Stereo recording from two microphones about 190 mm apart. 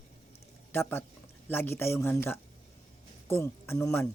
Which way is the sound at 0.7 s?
10° left (ahead or behind).